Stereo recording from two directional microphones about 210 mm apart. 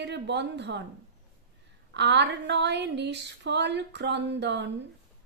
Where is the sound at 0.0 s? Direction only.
55° right (ahead or behind).